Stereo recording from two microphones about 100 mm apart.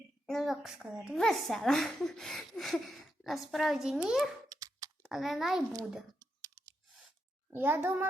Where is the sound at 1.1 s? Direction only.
5° left (ahead or behind).